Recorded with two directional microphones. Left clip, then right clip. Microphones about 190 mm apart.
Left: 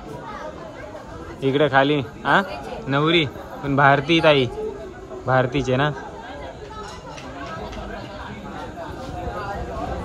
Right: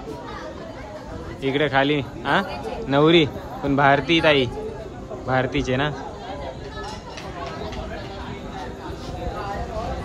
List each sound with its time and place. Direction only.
1.5 s a man's voice: 10° right (ahead or behind)
2.9 s a man's voice: 25° right (ahead or behind)
3.7 s a man's voice: 10° right (ahead or behind)